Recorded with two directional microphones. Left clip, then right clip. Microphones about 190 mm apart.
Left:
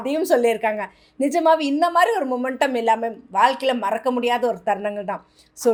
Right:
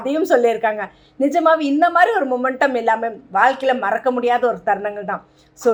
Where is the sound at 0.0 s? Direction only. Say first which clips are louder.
Right 3 dB; 35° left (ahead or behind).